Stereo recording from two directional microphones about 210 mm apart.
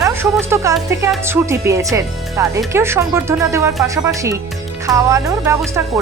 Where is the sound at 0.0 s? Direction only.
10° right (ahead or behind).